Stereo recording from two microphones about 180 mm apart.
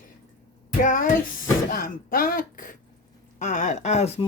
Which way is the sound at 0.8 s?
50° left (ahead or behind).